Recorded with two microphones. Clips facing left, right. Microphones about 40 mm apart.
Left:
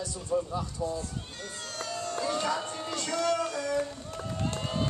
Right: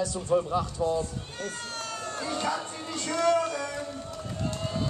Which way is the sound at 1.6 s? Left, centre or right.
Right.